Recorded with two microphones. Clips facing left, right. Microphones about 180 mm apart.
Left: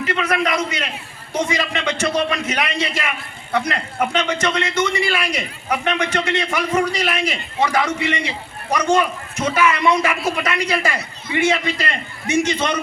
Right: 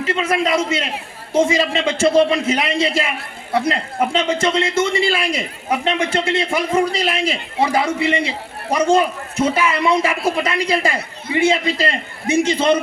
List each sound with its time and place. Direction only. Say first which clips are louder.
0.0 s a man's voice: right 2 dB; 25° right (ahead or behind)